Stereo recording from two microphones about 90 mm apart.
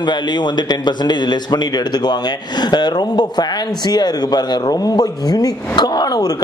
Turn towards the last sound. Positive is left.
turn(degrees=50)  # may be behind; listen again after turning